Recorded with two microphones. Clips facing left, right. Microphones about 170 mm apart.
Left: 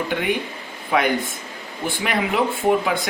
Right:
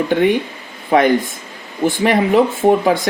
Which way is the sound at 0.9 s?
40° right (ahead or behind).